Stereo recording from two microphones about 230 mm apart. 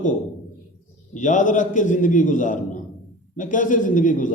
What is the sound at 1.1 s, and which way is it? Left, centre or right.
A man's voice, left.